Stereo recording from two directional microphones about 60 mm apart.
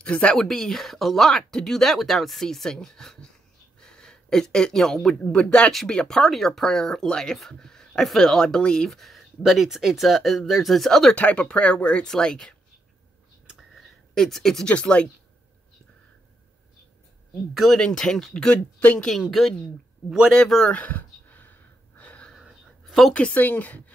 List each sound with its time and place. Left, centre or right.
0.0 s a woman's voice: left
0.4 s speech: centre
5.2 s speech: centre
11.1 s speech: left
14.1 s speech: centre
14.7 s speech: centre
17.7 s speech: centre
18.8 s speech: left
20.3 s speech: centre
20.7 s a sound: left
23.1 s a woman's voice: centre